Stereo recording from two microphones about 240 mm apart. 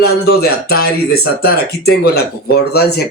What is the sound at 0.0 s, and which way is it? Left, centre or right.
A man's voice, left.